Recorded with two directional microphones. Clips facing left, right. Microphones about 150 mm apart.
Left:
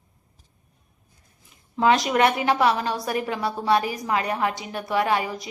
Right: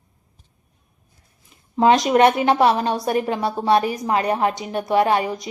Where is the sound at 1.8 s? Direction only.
20° right (ahead or behind).